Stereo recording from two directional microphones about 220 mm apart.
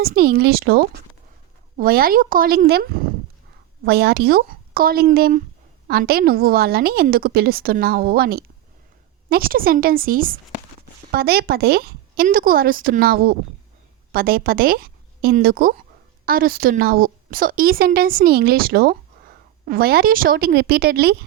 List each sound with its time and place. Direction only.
0.0 s a woman's voice: 45° right (ahead or behind)